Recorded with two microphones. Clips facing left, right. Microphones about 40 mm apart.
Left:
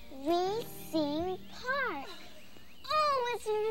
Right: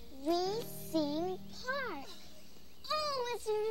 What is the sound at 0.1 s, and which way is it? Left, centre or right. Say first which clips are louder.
Music: left 3 dB; left.